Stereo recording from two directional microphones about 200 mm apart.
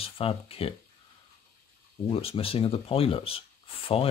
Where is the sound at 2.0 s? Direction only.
30° left (ahead or behind).